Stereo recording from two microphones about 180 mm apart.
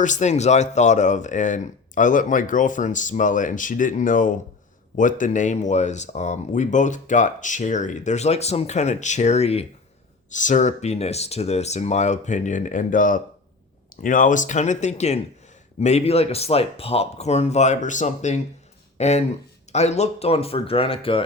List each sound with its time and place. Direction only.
0.0 s speech: 40° left (ahead or behind)